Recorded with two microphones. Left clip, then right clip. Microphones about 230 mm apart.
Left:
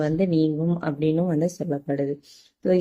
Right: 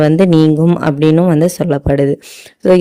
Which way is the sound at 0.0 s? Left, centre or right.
Right.